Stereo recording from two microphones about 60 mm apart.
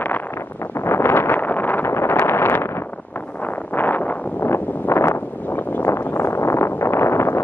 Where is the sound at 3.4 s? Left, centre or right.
Left.